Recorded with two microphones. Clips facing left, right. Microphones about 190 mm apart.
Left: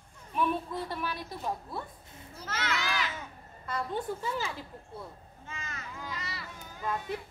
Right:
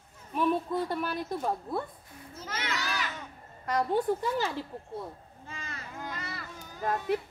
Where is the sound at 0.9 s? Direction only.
50° right (ahead or behind).